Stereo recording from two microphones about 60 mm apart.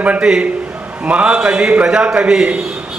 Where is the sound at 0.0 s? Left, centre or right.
Right.